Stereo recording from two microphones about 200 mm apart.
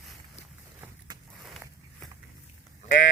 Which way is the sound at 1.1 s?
20° right (ahead or behind).